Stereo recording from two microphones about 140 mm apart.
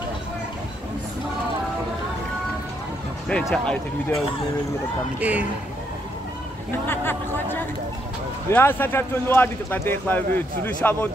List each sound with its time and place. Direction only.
3.3 s speech: 5° left (ahead or behind)
5.2 s a man's voice: 10° right (ahead or behind)
6.9 s speech: 15° left (ahead or behind)